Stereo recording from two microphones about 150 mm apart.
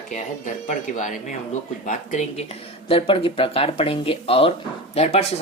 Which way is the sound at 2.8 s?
40° left (ahead or behind).